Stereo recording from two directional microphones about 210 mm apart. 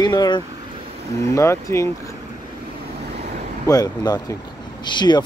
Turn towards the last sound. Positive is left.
turn(degrees=20)  # may be behind; listen again after turning